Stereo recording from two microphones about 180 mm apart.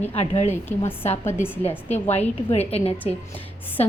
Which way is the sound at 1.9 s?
35° left (ahead or behind).